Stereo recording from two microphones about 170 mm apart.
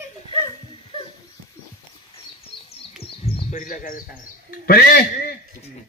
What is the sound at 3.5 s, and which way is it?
Frog, 50° left (ahead or behind).